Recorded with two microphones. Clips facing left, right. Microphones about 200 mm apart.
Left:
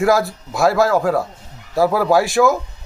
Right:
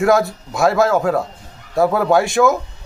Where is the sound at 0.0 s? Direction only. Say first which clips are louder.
Right 1 dB; centre (ahead or behind).